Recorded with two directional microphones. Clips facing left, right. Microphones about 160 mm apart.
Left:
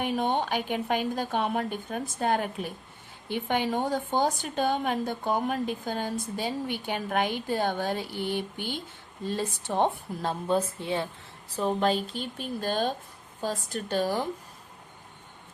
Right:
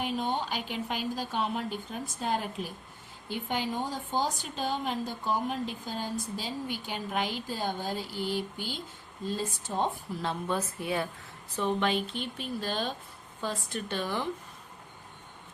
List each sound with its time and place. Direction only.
0.0 s a woman's voice: 60° left (ahead or behind)
10.2 s a woman's voice: 35° left (ahead or behind)
11.5 s speech: 35° left (ahead or behind)